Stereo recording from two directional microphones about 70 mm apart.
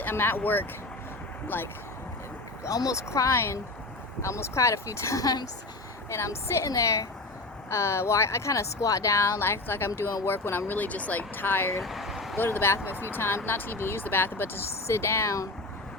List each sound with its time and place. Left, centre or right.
0.0 s speech: left
2.6 s speech: left
6.1 s speech: left
11.8 s vehicle: centre
12.4 s speech: left